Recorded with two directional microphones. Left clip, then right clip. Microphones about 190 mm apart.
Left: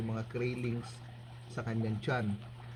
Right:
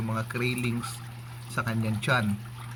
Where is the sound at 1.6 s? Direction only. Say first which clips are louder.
Right 8 dB; 10° left (ahead or behind).